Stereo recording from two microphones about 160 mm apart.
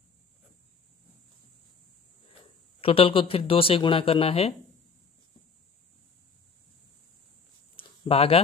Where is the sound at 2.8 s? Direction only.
35° left (ahead or behind).